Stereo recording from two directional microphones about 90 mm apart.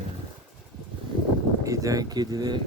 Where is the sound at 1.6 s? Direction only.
35° right (ahead or behind).